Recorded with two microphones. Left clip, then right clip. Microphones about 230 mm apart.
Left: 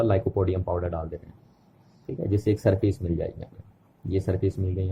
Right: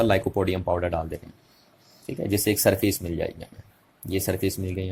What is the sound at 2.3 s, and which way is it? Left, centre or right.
Speech, centre.